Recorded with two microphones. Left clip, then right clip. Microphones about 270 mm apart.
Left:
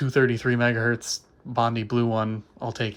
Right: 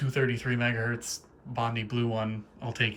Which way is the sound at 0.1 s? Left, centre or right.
Left.